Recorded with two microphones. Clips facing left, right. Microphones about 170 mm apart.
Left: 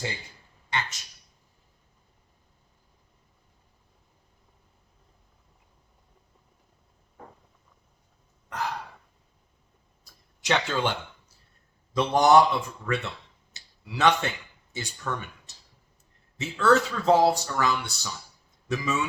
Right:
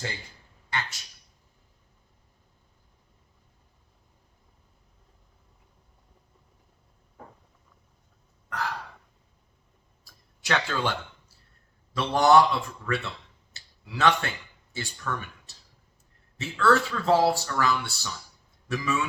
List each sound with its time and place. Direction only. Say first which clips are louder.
0.7 s a man's voice: left 1 dB; 20° left (ahead or behind)
8.4 s gasp: left 1 dB; 20° left (ahead or behind)
10.0 s a sound: even; 20° left (ahead or behind)
11.9 s speech: left 1 dB; 20° left (ahead or behind)